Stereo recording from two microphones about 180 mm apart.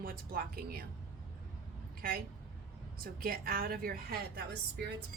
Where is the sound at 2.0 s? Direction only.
55° right (ahead or behind).